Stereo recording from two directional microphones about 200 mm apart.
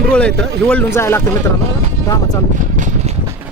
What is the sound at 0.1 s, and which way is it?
Speech, 5° left (ahead or behind).